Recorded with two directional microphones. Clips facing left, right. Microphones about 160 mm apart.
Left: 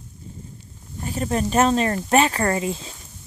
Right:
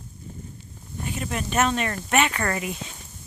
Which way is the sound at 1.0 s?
35° left (ahead or behind).